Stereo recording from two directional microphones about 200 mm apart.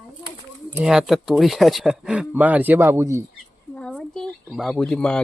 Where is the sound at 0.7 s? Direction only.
5° right (ahead or behind).